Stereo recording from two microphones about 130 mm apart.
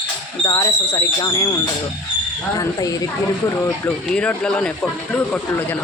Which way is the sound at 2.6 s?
25° left (ahead or behind).